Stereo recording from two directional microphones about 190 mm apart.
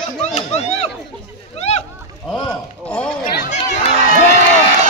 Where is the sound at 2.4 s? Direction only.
5° left (ahead or behind).